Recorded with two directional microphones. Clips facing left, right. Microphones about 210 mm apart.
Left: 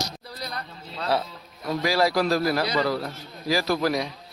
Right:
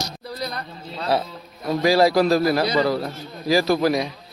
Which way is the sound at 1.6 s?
30° right (ahead or behind).